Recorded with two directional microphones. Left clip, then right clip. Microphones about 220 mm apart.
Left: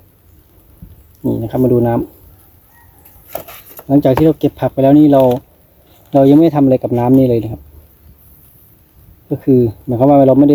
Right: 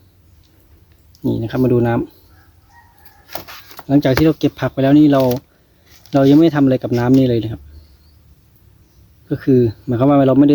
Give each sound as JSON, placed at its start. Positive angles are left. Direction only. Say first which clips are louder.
{"t": 1.3, "sound": "speech", "louder": "left 3 dB", "side_deg": 0}
{"t": 3.2, "sound": "a sound", "louder": "left 3 dB", "side_deg": 40}
{"t": 3.8, "sound": "speech", "louder": "left 3 dB", "side_deg": 0}
{"t": 9.3, "sound": "speech", "louder": "left 2 dB", "side_deg": 0}